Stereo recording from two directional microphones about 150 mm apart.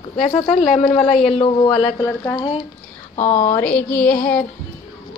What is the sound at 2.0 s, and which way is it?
Speech, 20° left (ahead or behind).